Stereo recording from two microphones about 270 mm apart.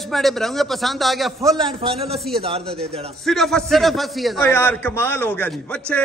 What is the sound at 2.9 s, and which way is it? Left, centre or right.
Speech, right.